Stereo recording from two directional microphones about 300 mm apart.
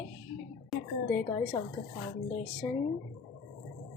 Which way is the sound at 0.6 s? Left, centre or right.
Centre.